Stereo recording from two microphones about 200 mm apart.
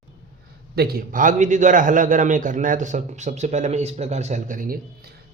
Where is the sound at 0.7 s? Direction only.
50° right (ahead or behind).